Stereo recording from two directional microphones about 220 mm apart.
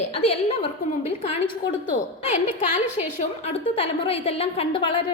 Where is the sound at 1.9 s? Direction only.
30° left (ahead or behind).